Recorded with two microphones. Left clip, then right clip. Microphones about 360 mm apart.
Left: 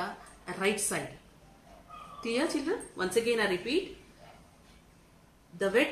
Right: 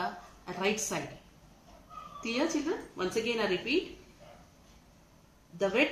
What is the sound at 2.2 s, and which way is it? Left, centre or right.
Speech, centre.